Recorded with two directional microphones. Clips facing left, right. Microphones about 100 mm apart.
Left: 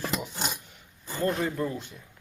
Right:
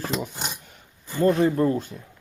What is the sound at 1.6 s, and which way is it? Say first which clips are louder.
Speech: right 9 dB; 45° right (ahead or behind).